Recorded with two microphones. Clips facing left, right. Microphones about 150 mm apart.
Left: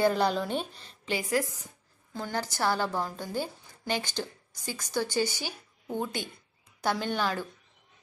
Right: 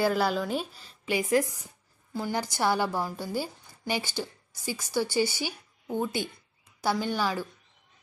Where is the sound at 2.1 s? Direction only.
10° right (ahead or behind).